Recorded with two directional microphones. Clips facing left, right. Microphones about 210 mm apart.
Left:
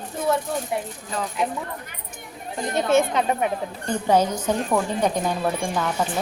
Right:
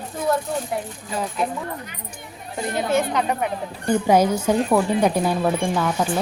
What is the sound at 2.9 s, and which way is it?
Speech, 25° left (ahead or behind).